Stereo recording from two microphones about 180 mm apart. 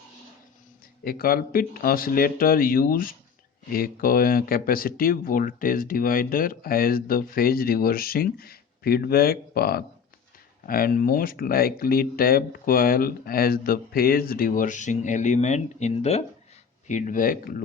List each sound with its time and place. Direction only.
1.0 s speech: 55° left (ahead or behind)